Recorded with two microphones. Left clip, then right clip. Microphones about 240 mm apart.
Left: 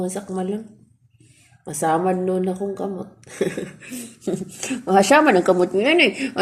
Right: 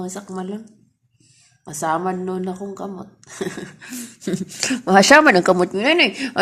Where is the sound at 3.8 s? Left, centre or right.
Right.